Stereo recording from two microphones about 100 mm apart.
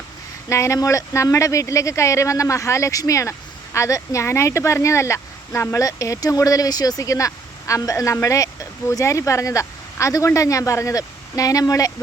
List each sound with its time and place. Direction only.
0.4 s speech: 30° left (ahead or behind)